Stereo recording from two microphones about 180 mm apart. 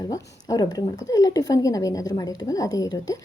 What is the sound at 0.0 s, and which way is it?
A woman's voice, 20° left (ahead or behind).